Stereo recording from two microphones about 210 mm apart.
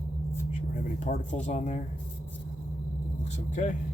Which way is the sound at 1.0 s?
35° left (ahead or behind).